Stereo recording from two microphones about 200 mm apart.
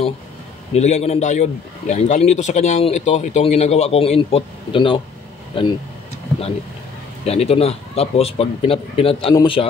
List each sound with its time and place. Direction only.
0.7 s a man's voice: 35° left (ahead or behind)
7.2 s a man's voice: 30° left (ahead or behind)